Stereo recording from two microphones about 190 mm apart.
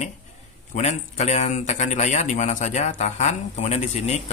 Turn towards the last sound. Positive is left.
turn(degrees=35)  # may be behind; listen again after turning